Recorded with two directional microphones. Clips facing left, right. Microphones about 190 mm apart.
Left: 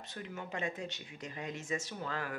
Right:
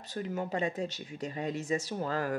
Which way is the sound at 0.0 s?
40° right (ahead or behind).